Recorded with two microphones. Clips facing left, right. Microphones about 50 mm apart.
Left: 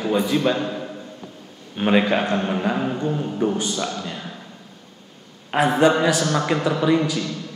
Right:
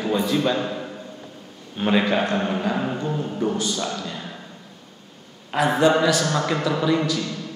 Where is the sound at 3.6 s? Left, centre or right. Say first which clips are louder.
Left 1 dB; left.